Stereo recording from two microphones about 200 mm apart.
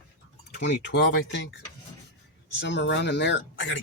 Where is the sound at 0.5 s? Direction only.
60° left (ahead or behind).